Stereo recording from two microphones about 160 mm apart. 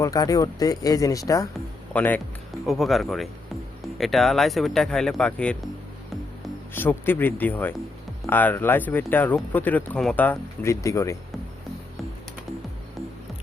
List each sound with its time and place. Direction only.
0.0 s speech: 20° left (ahead or behind)
1.9 s speech: 10° left (ahead or behind)
2.6 s speech: centre (ahead or behind)
6.7 s speech: 10° left (ahead or behind)